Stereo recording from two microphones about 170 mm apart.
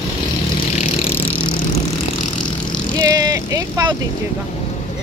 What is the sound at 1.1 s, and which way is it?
Vehicle, 10° left (ahead or behind).